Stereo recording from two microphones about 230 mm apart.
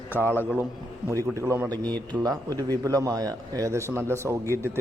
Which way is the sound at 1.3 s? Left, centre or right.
Centre.